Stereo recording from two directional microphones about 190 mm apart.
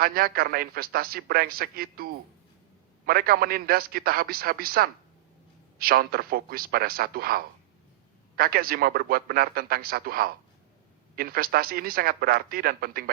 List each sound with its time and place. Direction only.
0.0 s a man's voice: 50° right (ahead or behind)